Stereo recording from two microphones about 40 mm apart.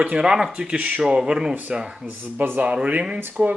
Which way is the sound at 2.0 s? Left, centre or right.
Right.